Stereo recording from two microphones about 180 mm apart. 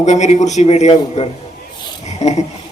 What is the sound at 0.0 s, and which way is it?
A man's voice, 40° left (ahead or behind).